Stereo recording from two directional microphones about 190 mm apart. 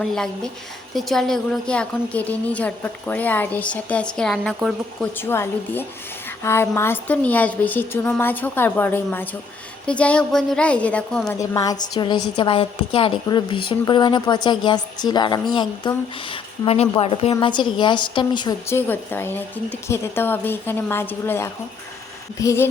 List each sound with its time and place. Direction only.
0.0 s a woman's voice: 5° left (ahead or behind)
11.3 s a woman's voice: 20° left (ahead or behind)
18.7 s a woman's voice: 10° left (ahead or behind)